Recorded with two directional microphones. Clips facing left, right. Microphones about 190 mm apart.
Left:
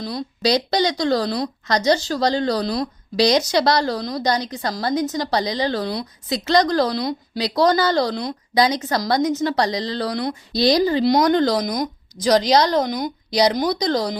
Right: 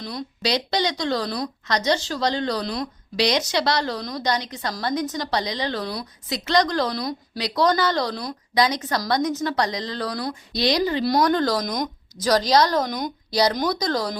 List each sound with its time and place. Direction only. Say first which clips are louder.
0.0 s speech: left 5 dB; 35° left (ahead or behind)
10.7 s speech: left 5 dB; 35° left (ahead or behind)
11.0 s a woman's voice: left 4 dB; 20° left (ahead or behind)
11.6 s speech: left 3 dB; 10° left (ahead or behind)
12.5 s speech: left 2 dB; 20° left (ahead or behind)